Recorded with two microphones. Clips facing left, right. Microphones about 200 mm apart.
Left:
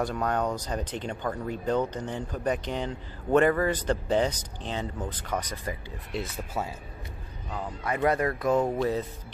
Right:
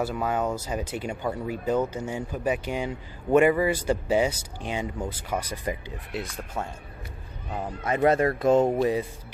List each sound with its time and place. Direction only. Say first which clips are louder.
0.0 s speech: right 1 dB; 5° right (ahead or behind)
6.1 s speech: left 1 dB; 5° left (ahead or behind)
7.5 s speech: right 3 dB; 20° right (ahead or behind)